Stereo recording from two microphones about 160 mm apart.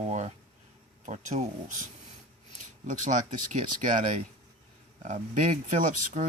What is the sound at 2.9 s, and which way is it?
Speech, 50° right (ahead or behind).